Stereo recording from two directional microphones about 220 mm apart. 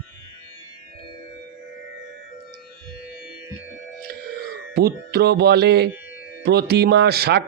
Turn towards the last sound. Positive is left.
turn(degrees=-45)  # may be behind; listen again after turning